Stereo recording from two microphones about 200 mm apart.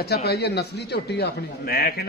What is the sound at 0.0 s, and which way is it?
A man's voice, 55° left (ahead or behind).